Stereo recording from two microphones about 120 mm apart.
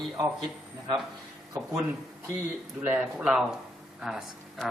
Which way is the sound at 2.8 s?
10° right (ahead or behind).